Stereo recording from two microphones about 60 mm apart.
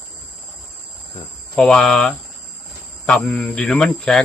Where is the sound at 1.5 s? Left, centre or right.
Centre.